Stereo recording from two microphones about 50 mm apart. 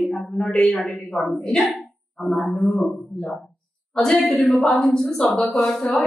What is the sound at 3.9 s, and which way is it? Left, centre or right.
Speech, centre.